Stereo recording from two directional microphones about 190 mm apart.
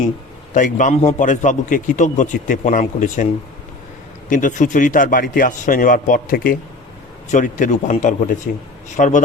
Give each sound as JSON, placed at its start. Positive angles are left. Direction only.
{"t": 0.5, "sound": "a man's voice", "side_deg": 40}
{"t": 4.3, "sound": "a man's voice", "side_deg": 45}